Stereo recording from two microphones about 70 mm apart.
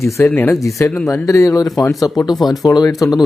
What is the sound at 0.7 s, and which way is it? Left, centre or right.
A man's voice, left.